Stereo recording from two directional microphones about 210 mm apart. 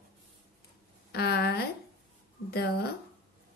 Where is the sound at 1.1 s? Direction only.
50° left (ahead or behind).